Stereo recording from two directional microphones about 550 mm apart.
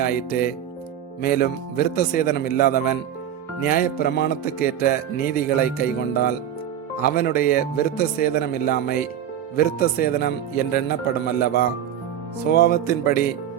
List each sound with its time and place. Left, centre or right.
0.0 s speech: centre